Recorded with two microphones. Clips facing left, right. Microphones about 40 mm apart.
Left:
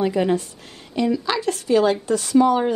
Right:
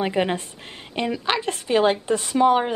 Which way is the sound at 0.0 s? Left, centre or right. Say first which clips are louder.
Left 3 dB; right.